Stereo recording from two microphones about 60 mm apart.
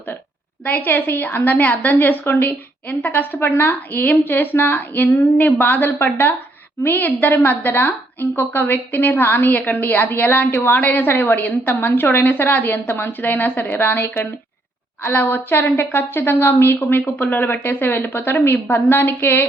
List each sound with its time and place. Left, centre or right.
0.6 s a woman's voice: left